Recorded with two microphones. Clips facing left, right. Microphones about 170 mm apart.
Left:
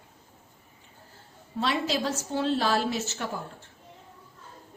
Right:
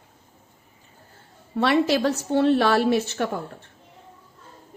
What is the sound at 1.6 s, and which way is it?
A woman's voice, 65° right (ahead or behind).